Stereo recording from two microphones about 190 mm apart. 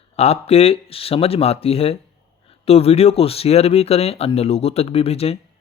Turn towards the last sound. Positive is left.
turn(degrees=30)  # may be behind; listen again after turning